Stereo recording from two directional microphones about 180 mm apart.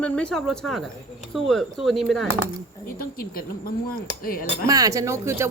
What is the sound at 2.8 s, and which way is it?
Speech, 55° left (ahead or behind).